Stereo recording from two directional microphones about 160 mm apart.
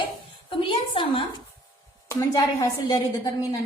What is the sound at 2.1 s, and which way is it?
A woman's voice, 20° left (ahead or behind).